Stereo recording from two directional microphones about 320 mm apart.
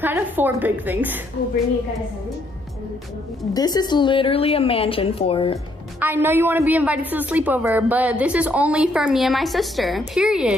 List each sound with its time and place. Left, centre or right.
0.0 s a woman's voice: centre
3.5 s a woman's voice: centre
5.9 s a woman's voice: centre